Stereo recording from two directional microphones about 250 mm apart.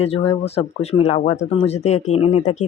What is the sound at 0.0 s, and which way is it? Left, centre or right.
Speech, left.